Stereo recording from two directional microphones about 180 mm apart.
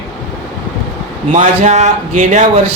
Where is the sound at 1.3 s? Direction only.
40° right (ahead or behind).